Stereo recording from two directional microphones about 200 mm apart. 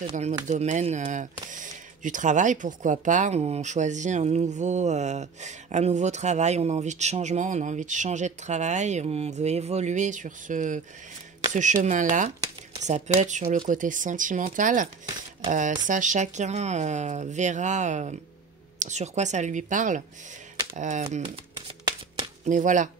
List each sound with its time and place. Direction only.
0.0 s speech: 35° right (ahead or behind)
22.4 s speech: 40° right (ahead or behind)